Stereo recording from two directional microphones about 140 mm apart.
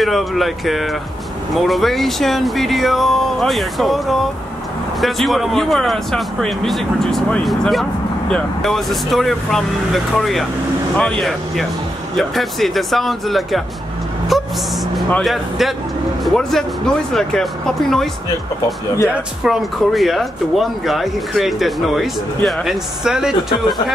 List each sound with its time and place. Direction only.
0.0 s speech: centre (ahead or behind)
19.4 s speech: centre (ahead or behind)